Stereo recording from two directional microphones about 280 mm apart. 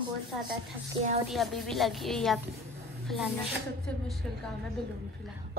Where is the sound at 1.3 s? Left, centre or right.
Centre.